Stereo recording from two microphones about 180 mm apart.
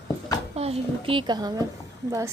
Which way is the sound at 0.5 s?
35° right (ahead or behind).